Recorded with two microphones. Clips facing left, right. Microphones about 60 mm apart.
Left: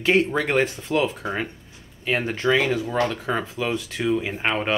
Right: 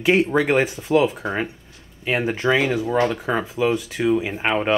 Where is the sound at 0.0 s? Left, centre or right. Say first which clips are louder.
Right 2 dB; centre.